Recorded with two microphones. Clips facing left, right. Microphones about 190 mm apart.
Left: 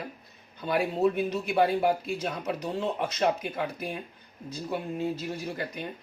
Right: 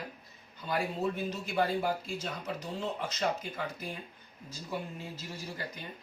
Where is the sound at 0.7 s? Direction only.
65° left (ahead or behind).